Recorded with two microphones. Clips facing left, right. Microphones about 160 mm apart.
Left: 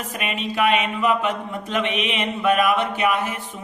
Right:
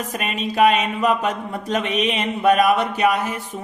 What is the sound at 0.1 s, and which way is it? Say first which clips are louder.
Mantra: right 2 dB; 40° right (ahead or behind).